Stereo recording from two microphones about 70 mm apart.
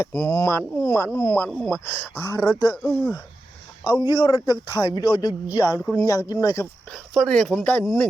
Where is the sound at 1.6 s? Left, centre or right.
Left.